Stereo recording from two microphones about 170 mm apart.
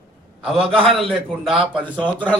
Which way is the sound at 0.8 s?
Centre (ahead or behind).